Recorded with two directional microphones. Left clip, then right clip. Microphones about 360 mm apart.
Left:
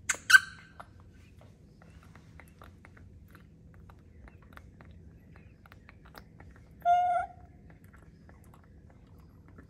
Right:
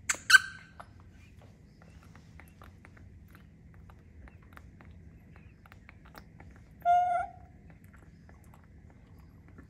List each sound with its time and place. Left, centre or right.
0.0 s squeak: centre
6.1 s cat: centre